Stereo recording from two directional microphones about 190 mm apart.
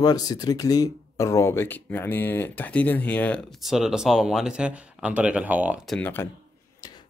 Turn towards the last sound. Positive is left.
turn(degrees=20)  # may be behind; listen again after turning